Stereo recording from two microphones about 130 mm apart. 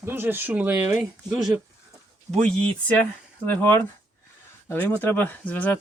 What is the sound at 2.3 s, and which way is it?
Speech, 5° left (ahead or behind).